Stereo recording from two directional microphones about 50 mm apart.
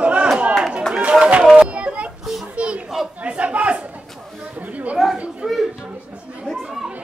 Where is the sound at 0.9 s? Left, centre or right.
Centre.